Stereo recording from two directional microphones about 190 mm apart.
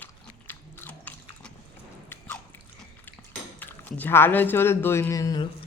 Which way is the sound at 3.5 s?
10° left (ahead or behind).